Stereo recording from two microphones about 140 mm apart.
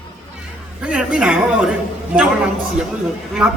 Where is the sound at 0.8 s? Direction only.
5° right (ahead or behind).